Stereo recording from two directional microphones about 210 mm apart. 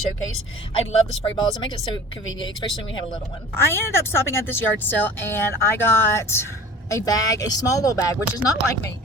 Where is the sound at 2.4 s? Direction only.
25° left (ahead or behind).